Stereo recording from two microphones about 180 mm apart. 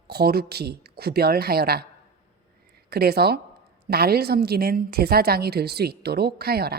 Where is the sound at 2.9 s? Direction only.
60° right (ahead or behind).